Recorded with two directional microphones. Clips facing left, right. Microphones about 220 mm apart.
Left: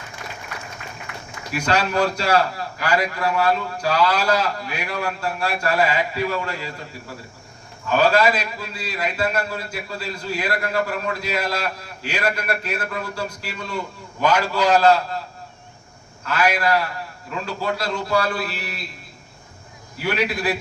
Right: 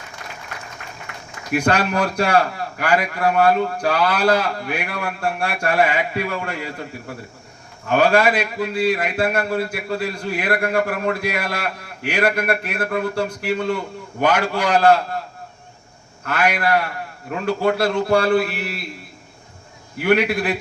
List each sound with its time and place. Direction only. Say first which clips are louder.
1.5 s a man's voice: right 2 dB; 55° right (ahead or behind)
7.9 s a man's voice: right 2 dB; 55° right (ahead or behind)
16.2 s a man's voice: even; 55° right (ahead or behind)
20.0 s a man's voice: right 6 dB; 60° right (ahead or behind)